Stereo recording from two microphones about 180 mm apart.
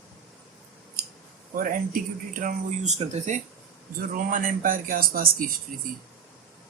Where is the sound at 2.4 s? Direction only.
45° right (ahead or behind).